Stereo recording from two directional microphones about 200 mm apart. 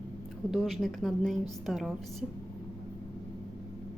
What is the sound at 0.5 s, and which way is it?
A woman's voice, centre (ahead or behind).